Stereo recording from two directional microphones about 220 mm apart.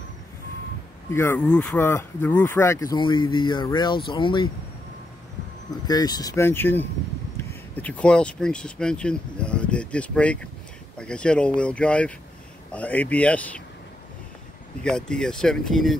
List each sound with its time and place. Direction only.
1.1 s speech: 10° left (ahead or behind)
5.9 s speech: 15° left (ahead or behind)
14.8 s speech: 5° left (ahead or behind)